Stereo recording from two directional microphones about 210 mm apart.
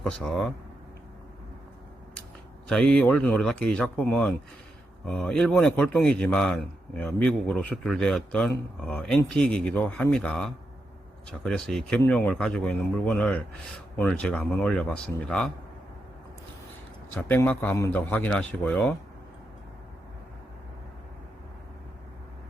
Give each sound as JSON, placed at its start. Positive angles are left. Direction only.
{"t": 0.0, "sound": "a man's voice", "side_deg": 5}
{"t": 2.6, "sound": "a man's voice", "side_deg": 5}
{"t": 17.2, "sound": "speech", "side_deg": 10}